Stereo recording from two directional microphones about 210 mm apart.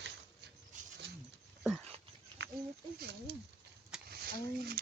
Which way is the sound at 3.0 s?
50° right (ahead or behind).